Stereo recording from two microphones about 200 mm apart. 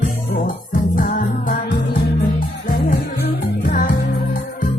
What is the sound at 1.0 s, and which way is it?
Music, 45° left (ahead or behind).